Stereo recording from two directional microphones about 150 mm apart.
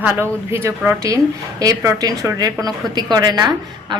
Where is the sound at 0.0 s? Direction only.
15° right (ahead or behind).